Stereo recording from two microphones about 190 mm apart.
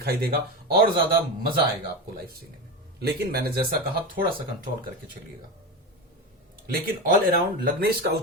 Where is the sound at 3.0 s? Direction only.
55° right (ahead or behind).